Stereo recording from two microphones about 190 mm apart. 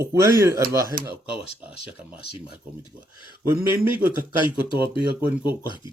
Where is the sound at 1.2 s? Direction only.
5° right (ahead or behind).